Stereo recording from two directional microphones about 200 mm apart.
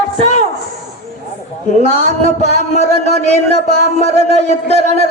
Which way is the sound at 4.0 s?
30° left (ahead or behind).